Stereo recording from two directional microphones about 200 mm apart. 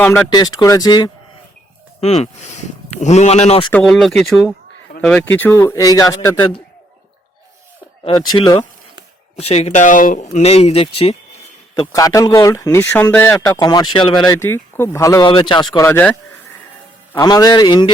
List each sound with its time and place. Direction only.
0.0 s speech: 10° left (ahead or behind)
0.3 s speech: 20° left (ahead or behind)
2.0 s speech: 30° left (ahead or behind)
3.7 s speech: 5° left (ahead or behind); by 6.6 s 25° left (ahead or behind)
8.0 s speech: 25° left (ahead or behind)
11.7 s speech: 15° left (ahead or behind)
14.3 s speech: 10° left (ahead or behind)
15.7 s speech: 10° left (ahead or behind)